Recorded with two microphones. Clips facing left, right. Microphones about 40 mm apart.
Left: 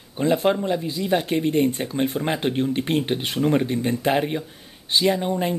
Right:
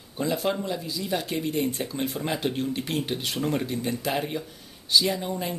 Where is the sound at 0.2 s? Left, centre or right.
Left.